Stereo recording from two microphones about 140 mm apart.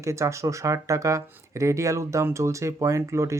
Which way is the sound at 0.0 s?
20° right (ahead or behind).